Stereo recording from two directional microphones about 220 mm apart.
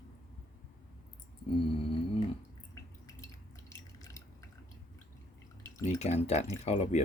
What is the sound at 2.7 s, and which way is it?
Drip, 15° left (ahead or behind).